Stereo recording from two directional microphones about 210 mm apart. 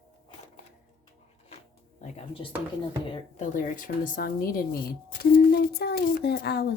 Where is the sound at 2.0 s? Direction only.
30° left (ahead or behind).